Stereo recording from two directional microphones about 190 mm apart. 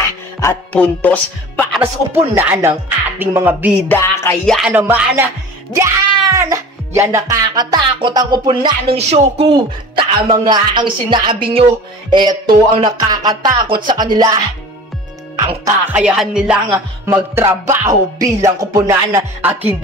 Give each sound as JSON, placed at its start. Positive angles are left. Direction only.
{"t": 0.4, "sound": "music", "side_deg": 10}
{"t": 1.7, "sound": "music", "side_deg": -10}
{"t": 3.9, "sound": "music", "side_deg": 15}
{"t": 4.5, "sound": "music", "side_deg": -5}
{"t": 7.0, "sound": "music", "side_deg": -15}
{"t": 15.9, "sound": "music", "side_deg": -5}